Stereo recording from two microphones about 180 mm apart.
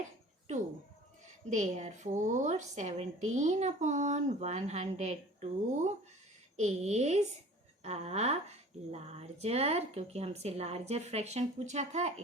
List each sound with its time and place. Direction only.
1.5 s a woman's voice: 40° right (ahead or behind)